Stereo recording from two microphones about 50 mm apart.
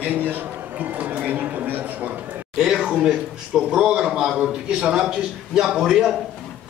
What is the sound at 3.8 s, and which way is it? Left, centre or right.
A man's voice, right.